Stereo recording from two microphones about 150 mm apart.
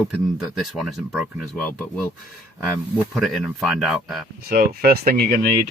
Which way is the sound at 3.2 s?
Centre (ahead or behind).